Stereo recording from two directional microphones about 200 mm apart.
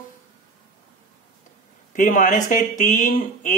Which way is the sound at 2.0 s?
40° left (ahead or behind).